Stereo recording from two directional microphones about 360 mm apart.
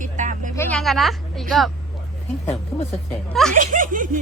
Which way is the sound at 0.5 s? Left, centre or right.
Centre.